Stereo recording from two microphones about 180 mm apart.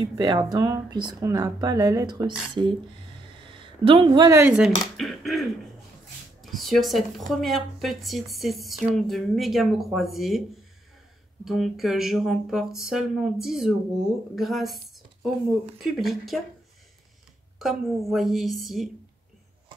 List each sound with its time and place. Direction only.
0.0 s speech: 25° right (ahead or behind); by 10.4 s centre (ahead or behind)
11.4 s speech: centre (ahead or behind)
15.8 s speech: centre (ahead or behind)
17.6 s speech: centre (ahead or behind)